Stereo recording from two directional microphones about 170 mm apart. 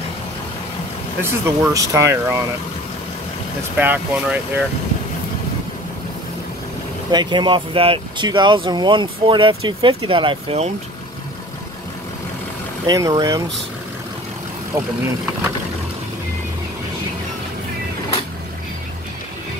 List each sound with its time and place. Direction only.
1.2 s speech: 15° right (ahead or behind)
3.7 s speech: 10° right (ahead or behind)
7.1 s speech: 25° right (ahead or behind)
12.8 s speech: 25° right (ahead or behind)